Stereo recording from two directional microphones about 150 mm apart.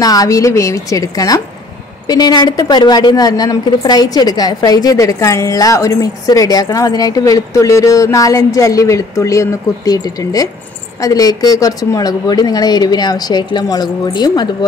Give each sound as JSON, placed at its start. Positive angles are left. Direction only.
{"t": 0.0, "sound": "a woman's voice", "side_deg": 25}